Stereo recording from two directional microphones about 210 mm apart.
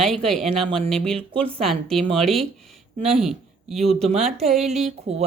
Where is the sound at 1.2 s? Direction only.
25° right (ahead or behind).